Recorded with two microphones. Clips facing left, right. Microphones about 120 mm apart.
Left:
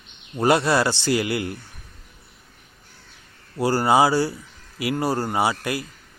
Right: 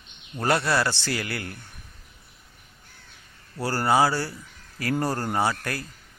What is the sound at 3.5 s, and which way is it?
A man's voice, 15° left (ahead or behind).